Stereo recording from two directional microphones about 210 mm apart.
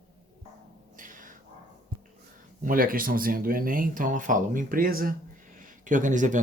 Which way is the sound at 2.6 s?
45° right (ahead or behind).